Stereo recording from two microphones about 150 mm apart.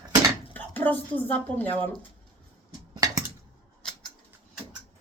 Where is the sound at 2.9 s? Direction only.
25° right (ahead or behind).